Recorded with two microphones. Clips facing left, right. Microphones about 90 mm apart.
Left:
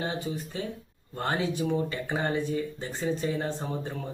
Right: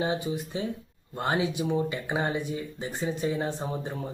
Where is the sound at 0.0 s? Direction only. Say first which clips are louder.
Right 3 dB; 15° right (ahead or behind).